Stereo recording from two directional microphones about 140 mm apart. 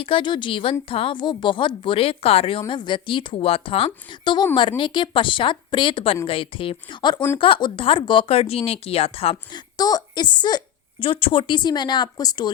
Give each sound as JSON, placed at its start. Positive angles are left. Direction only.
{"t": 0.0, "sound": "a woman's voice", "side_deg": 40}
{"t": 9.7, "sound": "a woman's voice", "side_deg": 30}